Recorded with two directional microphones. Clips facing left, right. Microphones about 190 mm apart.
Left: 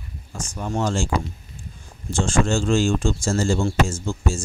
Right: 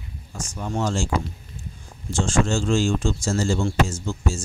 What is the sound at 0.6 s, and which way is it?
Speech, 50° left (ahead or behind).